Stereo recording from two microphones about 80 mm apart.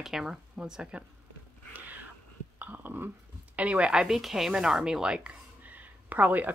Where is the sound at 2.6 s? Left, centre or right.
Right.